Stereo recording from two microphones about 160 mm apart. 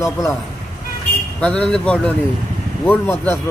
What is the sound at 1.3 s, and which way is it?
A man's voice, 10° left (ahead or behind).